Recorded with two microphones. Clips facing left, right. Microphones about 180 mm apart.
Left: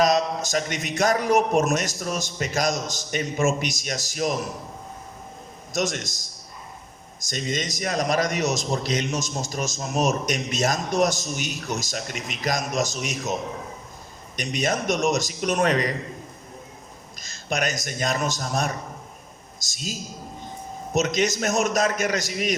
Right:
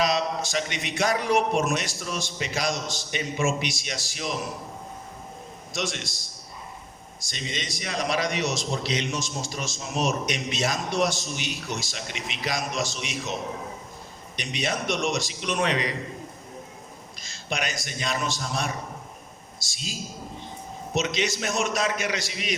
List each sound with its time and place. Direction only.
0.0 s a man's voice: 45° left (ahead or behind)
5.7 s a man's voice: 45° left (ahead or behind)
7.3 s a man's voice: 45° left (ahead or behind)
14.3 s a man's voice: 45° left (ahead or behind)
17.2 s a man's voice: 45° left (ahead or behind)
19.7 s a man's voice: 45° left (ahead or behind)